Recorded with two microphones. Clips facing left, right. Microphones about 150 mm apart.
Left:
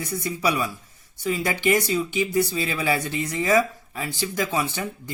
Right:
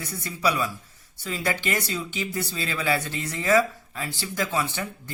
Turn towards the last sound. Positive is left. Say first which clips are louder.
# left 3 dB
turn(degrees=15)  # may be behind; listen again after turning